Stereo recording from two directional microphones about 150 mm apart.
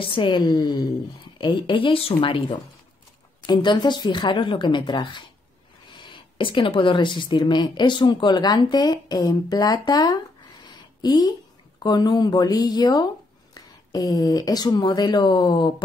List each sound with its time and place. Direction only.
0.0 s a woman's voice: 35° left (ahead or behind)